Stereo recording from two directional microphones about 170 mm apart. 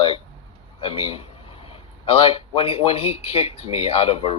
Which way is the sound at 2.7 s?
35° left (ahead or behind).